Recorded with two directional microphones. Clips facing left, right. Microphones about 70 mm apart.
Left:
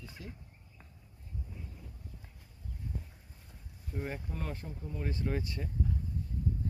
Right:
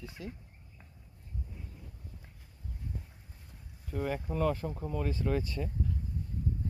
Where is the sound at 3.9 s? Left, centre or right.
Right.